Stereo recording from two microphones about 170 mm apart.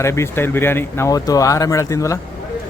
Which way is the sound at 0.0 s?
15° left (ahead or behind).